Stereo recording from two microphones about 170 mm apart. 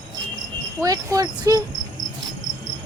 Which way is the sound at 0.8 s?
20° right (ahead or behind).